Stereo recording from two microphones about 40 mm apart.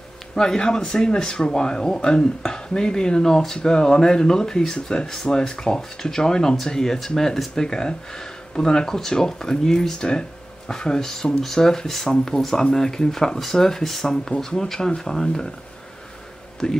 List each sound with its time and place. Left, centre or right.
0.4 s speech: centre
16.6 s speech: centre